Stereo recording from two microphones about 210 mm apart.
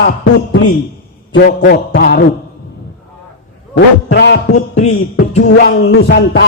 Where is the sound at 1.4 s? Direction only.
45° left (ahead or behind).